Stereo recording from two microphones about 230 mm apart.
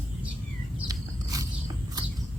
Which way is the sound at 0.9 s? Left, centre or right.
Centre.